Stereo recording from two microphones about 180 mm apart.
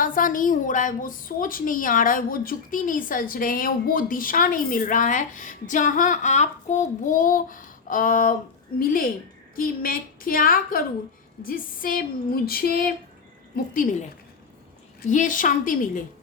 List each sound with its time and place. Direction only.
0.0 s a woman's voice: 50° left (ahead or behind)
15.1 s a woman's voice: 45° left (ahead or behind)